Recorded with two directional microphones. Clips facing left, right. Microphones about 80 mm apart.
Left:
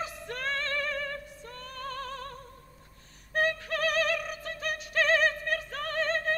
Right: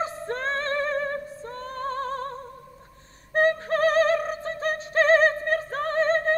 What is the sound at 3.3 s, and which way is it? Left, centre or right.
Music, right.